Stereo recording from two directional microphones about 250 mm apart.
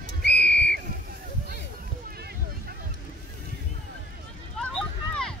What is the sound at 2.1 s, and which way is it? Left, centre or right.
Vehicle, right.